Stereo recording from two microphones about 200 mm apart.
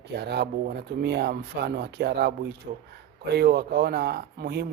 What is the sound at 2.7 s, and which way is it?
Speech, 45° right (ahead or behind).